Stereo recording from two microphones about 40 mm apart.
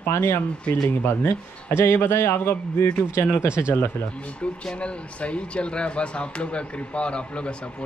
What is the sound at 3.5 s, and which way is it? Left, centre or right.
Speech, right.